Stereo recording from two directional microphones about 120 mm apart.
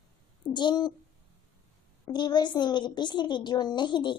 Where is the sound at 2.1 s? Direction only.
40° left (ahead or behind).